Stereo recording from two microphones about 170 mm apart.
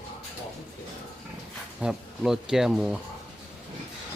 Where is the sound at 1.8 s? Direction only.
5° right (ahead or behind).